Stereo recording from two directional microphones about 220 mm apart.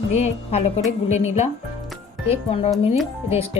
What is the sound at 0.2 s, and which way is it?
A woman's voice, 30° left (ahead or behind).